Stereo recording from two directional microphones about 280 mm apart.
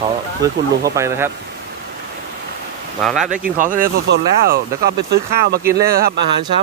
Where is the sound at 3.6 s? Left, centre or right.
Right.